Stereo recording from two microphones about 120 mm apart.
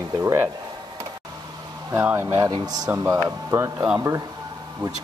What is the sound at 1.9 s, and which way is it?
Speech, 20° right (ahead or behind).